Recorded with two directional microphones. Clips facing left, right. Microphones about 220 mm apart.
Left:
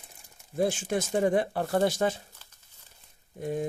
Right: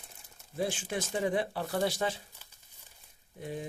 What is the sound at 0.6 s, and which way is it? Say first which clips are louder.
Speech: left 6 dB; 45° left (ahead or behind).